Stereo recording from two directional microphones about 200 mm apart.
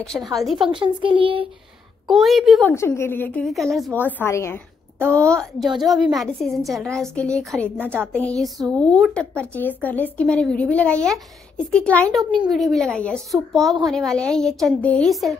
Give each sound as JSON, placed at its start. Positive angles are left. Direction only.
{"t": 0.0, "sound": "a woman's voice", "side_deg": 0}
{"t": 0.6, "sound": "a child's voice", "side_deg": -25}
{"t": 2.0, "sound": "a woman's voice", "side_deg": 0}
{"t": 2.7, "sound": "speech", "side_deg": 15}
{"t": 4.2, "sound": "a woman's voice", "side_deg": 10}
{"t": 7.8, "sound": "a sound", "side_deg": -10}
{"t": 8.6, "sound": "a woman's voice", "side_deg": 5}